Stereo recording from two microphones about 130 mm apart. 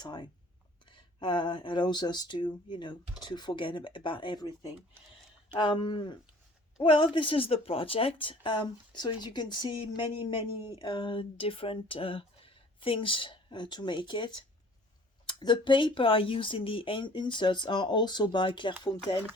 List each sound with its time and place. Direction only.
0.0 s speech: 35° left (ahead or behind)
5.5 s speech: 35° left (ahead or behind)